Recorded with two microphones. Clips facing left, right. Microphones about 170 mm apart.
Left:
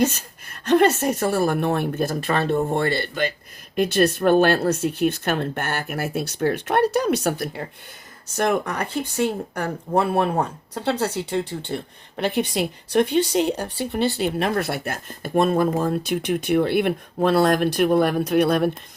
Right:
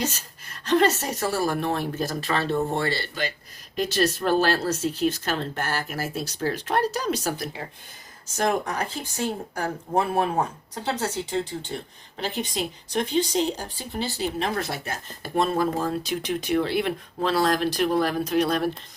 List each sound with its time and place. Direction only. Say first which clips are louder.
0.0 s speech: left 8 dB; 55° left (ahead or behind)